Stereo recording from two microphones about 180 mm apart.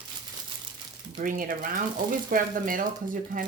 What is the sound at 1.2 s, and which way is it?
Speech, 50° right (ahead or behind).